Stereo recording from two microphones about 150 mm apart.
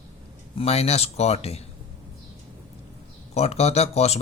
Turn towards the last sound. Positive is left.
turn(degrees=45)  # may be behind; listen again after turning